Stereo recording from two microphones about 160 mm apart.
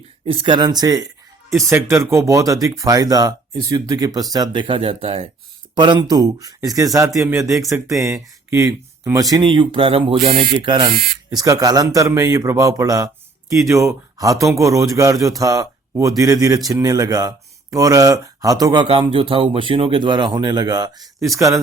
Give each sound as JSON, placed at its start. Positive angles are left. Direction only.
{"t": 0.3, "sound": "speech", "side_deg": -30}